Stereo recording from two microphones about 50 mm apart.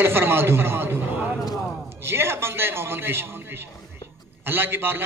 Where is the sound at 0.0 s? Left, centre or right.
Right.